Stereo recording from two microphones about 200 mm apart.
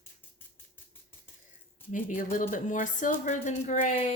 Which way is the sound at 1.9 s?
40° left (ahead or behind).